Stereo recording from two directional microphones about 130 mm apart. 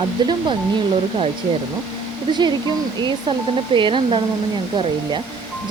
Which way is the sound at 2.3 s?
35° right (ahead or behind).